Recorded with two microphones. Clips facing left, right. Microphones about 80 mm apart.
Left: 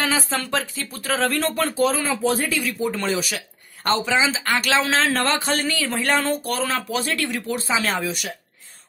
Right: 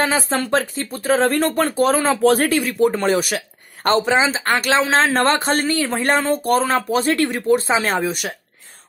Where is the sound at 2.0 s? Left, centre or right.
Right.